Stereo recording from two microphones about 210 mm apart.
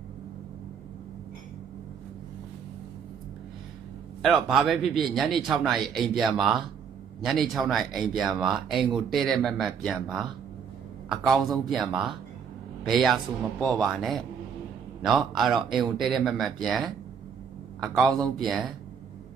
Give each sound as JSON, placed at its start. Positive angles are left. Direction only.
{"t": 4.2, "sound": "a man's voice", "side_deg": 0}